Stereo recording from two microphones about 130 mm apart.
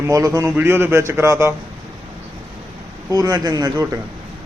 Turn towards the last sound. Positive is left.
turn(degrees=-30)  # may be behind; listen again after turning